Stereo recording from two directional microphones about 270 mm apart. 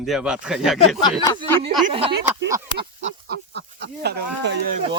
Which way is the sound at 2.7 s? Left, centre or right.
Right.